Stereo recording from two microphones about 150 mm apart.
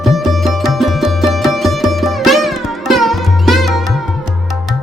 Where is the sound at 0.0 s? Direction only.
Centre (ahead or behind).